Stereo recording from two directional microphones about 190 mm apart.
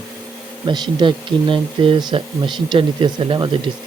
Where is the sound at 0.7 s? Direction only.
25° right (ahead or behind).